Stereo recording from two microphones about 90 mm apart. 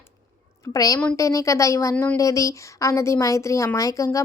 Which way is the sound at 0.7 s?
40° left (ahead or behind).